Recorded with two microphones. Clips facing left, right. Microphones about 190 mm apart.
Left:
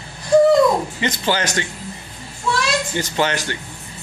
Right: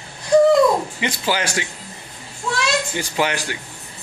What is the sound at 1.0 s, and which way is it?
Speech, 5° right (ahead or behind).